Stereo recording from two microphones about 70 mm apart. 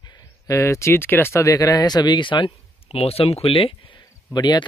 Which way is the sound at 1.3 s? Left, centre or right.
Left.